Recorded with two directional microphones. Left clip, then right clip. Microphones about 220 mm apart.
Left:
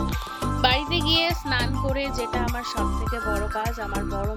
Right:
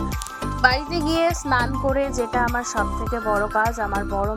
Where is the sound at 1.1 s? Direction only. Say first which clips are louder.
Right 2 dB; 45° right (ahead or behind).